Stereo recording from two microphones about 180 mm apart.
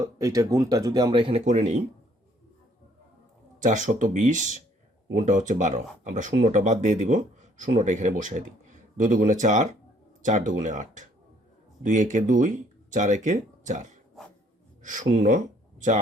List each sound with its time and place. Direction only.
0.0 s speech: 15° right (ahead or behind); by 1.7 s 40° right (ahead or behind)
3.6 s speech: 45° right (ahead or behind)